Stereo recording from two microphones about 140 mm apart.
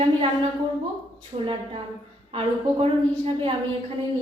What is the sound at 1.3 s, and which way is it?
Speech, 40° right (ahead or behind).